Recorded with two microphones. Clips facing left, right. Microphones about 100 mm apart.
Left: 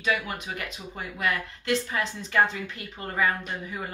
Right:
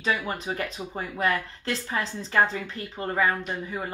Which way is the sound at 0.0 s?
35° right (ahead or behind).